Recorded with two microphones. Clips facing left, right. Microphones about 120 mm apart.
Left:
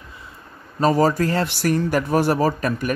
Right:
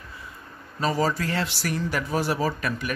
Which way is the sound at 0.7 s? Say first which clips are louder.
Left 7 dB; 45° left (ahead or behind).